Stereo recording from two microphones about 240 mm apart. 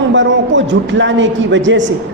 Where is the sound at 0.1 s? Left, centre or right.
Right.